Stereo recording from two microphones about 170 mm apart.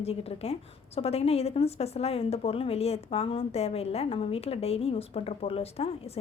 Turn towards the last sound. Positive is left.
turn(degrees=35)  # may be behind; listen again after turning